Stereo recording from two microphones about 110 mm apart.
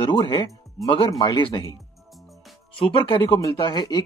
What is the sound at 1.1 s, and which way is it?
Speech, 40° left (ahead or behind).